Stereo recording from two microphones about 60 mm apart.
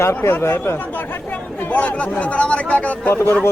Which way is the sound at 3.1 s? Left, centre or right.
Left.